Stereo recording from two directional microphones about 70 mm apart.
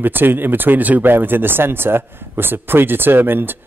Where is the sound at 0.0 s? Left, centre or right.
Right.